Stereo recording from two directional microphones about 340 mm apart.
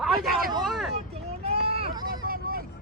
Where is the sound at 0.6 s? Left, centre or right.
Centre.